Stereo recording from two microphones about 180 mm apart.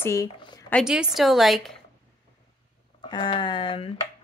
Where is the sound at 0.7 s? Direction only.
Centre (ahead or behind).